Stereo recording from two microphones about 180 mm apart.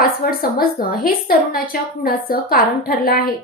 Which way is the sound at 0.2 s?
55° left (ahead or behind).